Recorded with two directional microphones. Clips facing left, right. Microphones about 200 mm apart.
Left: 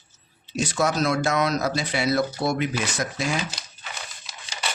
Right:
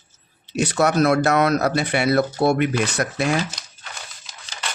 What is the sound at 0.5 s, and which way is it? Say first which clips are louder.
Speech: right 5 dB; 65° right (ahead or behind).